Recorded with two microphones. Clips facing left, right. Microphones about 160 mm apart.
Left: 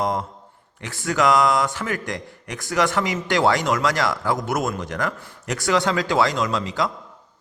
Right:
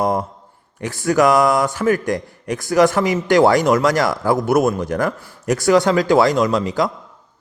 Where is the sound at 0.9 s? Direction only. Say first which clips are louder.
Right 5 dB; 35° right (ahead or behind).